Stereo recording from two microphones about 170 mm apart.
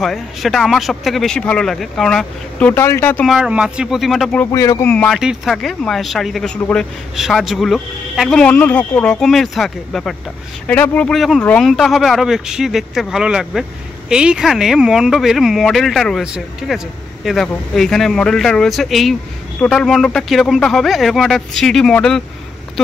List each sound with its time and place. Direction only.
0.0 s speech: centre (ahead or behind)
3.3 s speech: 5° right (ahead or behind)
4.5 s speech: 20° left (ahead or behind)
4.9 s speech: 10° left (ahead or behind)
5.2 s speech: 5° right (ahead or behind)